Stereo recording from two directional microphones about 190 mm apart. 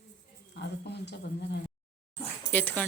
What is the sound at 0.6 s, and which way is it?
Speech, 60° left (ahead or behind).